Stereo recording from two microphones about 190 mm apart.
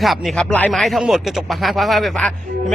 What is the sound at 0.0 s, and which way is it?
Speech, centre (ahead or behind).